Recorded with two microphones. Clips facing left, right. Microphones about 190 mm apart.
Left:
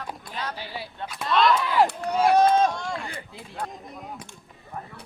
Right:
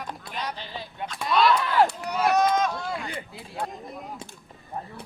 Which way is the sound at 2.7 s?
5° right (ahead or behind).